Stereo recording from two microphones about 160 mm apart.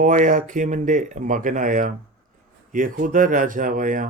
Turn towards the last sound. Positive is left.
turn(degrees=-55)  # may be behind; listen again after turning